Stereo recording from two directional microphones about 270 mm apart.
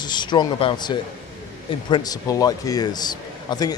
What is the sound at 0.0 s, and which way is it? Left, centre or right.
A man's voice, centre.